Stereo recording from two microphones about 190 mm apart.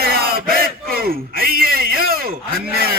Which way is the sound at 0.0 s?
50° right (ahead or behind).